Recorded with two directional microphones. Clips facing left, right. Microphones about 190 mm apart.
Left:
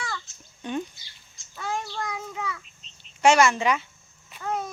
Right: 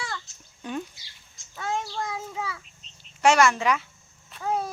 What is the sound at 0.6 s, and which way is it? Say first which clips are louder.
Speech: left 2 dB; centre (ahead or behind).